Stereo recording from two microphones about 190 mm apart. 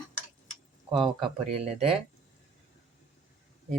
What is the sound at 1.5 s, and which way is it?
Speech, 35° right (ahead or behind).